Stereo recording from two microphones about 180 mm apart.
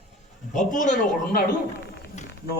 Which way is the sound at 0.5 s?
45° left (ahead or behind).